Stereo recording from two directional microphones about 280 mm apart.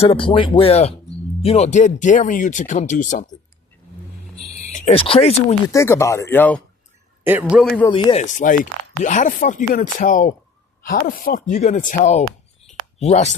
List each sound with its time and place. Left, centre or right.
0.0 s speech: centre
4.7 s speech: left
5.7 s speech: centre
7.3 s a man's voice: centre
7.9 s speech: centre